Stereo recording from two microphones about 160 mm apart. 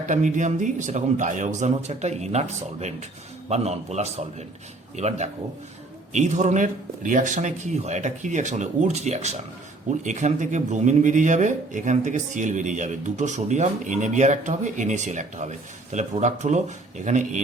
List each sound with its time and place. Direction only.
0.0 s speech: 50° right (ahead or behind)